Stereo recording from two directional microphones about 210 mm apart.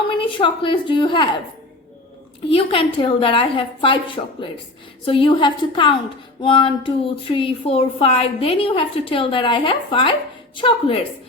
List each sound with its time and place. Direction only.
0.1 s speech: 25° left (ahead or behind)
2.5 s speech: 25° left (ahead or behind)